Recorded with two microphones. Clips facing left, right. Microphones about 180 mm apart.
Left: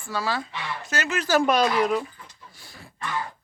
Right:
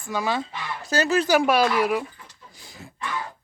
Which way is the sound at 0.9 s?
35° right (ahead or behind).